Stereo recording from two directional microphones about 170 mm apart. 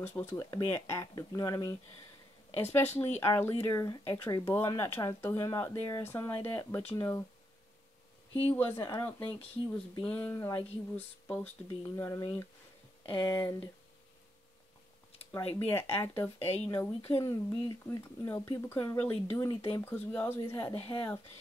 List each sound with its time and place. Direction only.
0.0 s speech: 15° left (ahead or behind)
8.5 s speech: 10° left (ahead or behind)
15.7 s speech: 15° left (ahead or behind)
16.3 s speech: 35° left (ahead or behind)
16.6 s speech: 15° left (ahead or behind)